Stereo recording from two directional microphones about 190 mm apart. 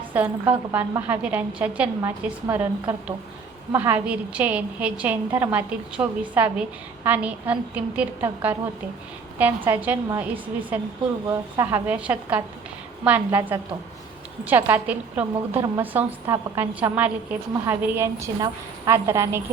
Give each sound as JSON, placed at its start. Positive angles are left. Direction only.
{"t": 0.1, "sound": "a woman's voice", "side_deg": -10}